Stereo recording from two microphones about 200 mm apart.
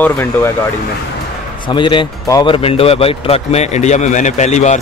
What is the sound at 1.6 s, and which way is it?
A man's voice, 25° left (ahead or behind).